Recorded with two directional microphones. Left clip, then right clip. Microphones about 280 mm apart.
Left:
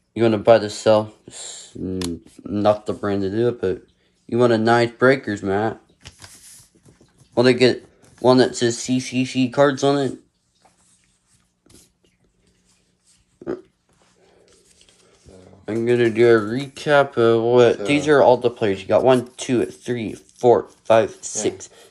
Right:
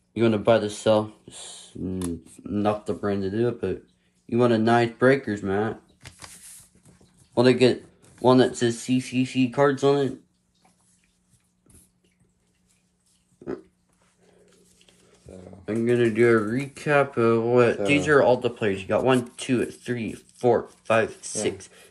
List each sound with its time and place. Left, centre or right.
0.1 s speech: centre
7.7 s speech: centre
15.6 s speech: centre